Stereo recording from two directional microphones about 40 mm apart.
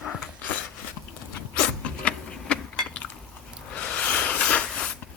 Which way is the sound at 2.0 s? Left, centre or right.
Left.